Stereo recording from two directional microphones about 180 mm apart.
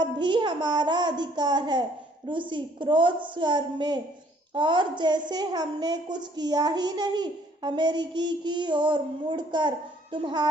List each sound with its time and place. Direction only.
0.0 s a woman's voice: 25° right (ahead or behind)